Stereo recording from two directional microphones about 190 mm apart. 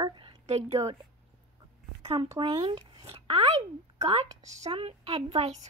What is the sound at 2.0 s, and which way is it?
A woman's voice, 25° right (ahead or behind).